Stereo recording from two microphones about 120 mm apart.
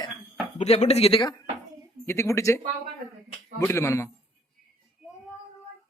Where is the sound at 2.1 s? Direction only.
25° left (ahead or behind).